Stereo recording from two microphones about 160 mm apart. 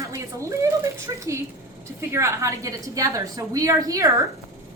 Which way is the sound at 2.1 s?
15° right (ahead or behind).